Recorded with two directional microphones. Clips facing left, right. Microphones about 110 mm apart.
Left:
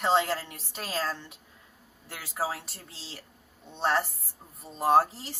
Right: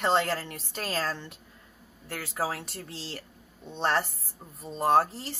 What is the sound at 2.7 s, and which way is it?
Speech, 55° right (ahead or behind).